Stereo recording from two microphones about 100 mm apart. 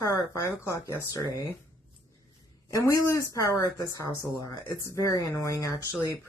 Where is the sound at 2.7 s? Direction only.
35° left (ahead or behind).